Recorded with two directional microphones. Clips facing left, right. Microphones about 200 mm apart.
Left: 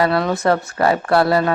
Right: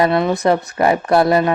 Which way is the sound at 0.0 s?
15° right (ahead or behind).